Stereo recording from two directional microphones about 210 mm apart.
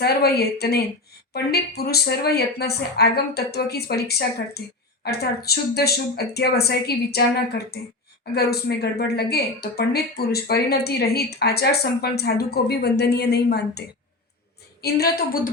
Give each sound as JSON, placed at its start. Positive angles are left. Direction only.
{"t": 0.0, "sound": "speech", "side_deg": 50}